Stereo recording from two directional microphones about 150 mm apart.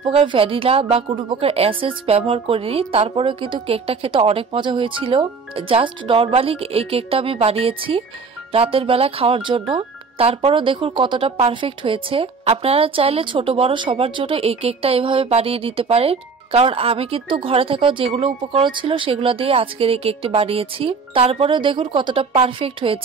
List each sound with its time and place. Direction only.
0.0 s a woman's voice: 35° right (ahead or behind)